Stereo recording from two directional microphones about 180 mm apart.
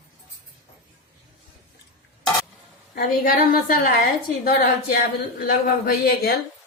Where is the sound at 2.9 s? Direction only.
55° left (ahead or behind).